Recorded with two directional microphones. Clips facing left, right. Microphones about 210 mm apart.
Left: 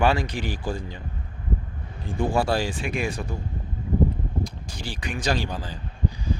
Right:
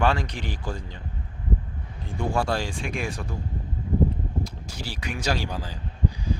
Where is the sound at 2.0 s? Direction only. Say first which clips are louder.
Left 3 dB; 5° left (ahead or behind).